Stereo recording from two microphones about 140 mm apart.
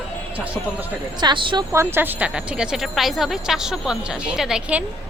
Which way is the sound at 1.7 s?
15° right (ahead or behind).